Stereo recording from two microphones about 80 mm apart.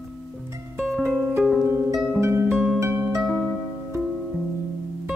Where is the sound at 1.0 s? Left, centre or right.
Right.